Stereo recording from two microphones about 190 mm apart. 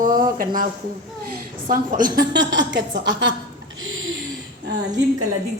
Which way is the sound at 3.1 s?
80° right.